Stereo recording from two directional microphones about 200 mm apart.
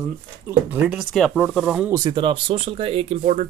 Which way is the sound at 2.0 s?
20° right (ahead or behind).